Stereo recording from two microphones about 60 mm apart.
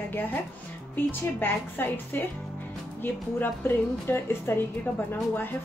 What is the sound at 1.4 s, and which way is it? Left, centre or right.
Speech, left.